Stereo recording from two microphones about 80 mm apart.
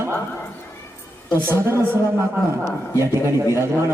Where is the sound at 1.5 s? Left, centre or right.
Right.